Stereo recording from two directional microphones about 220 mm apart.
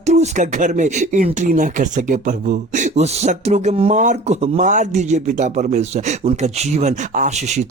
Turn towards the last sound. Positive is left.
turn(degrees=-30)  # may be behind; listen again after turning